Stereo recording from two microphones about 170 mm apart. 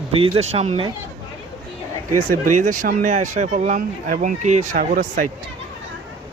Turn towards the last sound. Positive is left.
turn(degrees=-55)  # may be behind; listen again after turning